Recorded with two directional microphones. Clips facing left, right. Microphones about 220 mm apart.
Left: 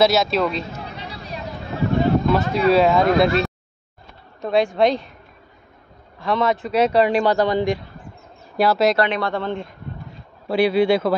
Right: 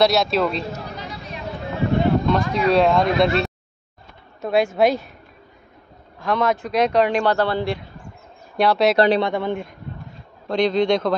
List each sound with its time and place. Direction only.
0.0 s speech: centre (ahead or behind)
2.2 s speech: 5° left (ahead or behind)
6.1 s speech: centre (ahead or behind)
8.5 s speech: centre (ahead or behind)
8.9 s speech: 35° right (ahead or behind)
9.2 s a man's voice: 15° right (ahead or behind)
10.5 s speech: 10° left (ahead or behind)